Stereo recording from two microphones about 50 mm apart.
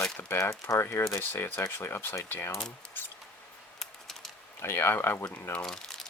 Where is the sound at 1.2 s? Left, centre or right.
Left.